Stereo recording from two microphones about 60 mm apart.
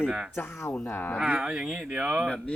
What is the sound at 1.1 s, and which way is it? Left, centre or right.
Speech, centre.